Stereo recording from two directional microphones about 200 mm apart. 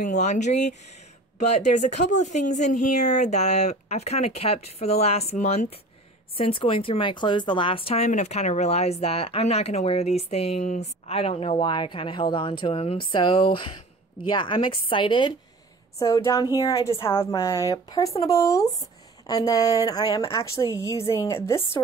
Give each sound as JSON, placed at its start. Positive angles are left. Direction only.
{"t": 0.0, "sound": "a woman's voice", "side_deg": 35}